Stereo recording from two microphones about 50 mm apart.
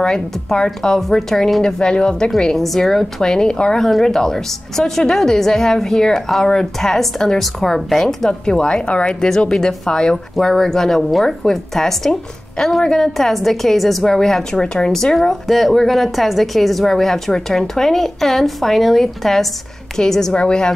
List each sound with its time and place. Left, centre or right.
0.0 s a woman's voice: centre
8.3 s a woman's voice: centre
15.1 s a woman's voice: centre